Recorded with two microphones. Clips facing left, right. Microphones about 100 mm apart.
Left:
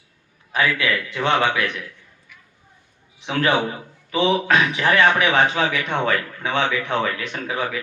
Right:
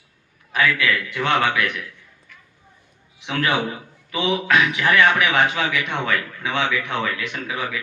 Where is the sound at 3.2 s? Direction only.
30° left (ahead or behind).